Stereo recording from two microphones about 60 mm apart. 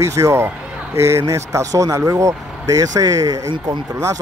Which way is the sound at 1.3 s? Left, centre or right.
Right.